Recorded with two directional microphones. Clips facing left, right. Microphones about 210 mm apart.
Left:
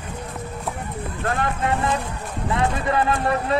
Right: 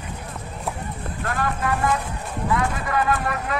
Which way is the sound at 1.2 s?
25° left (ahead or behind).